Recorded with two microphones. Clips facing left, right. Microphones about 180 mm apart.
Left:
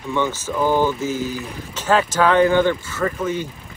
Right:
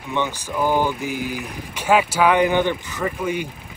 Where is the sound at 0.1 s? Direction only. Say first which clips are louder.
Left 2 dB; 15° right (ahead or behind).